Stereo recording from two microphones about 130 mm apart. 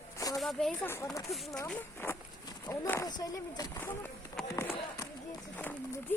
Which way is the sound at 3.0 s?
30° left (ahead or behind).